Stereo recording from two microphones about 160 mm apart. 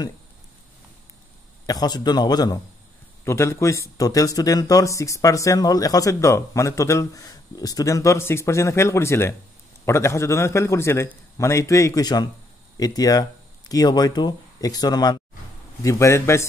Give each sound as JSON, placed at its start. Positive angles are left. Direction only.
{"t": 1.7, "sound": "a man's voice", "side_deg": 25}